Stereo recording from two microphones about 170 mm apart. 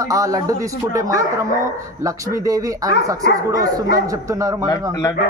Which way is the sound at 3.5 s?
20° right (ahead or behind).